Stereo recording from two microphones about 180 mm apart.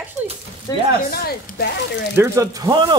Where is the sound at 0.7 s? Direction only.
15° left (ahead or behind).